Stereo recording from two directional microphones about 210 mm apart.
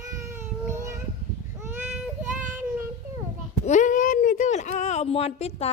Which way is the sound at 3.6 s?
35° left (ahead or behind).